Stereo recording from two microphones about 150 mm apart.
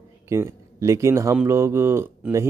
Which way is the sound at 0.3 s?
20° right (ahead or behind).